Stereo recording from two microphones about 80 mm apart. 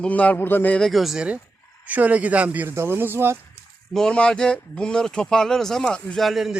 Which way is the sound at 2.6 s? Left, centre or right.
Right.